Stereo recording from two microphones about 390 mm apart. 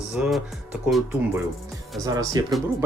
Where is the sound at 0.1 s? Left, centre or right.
Centre.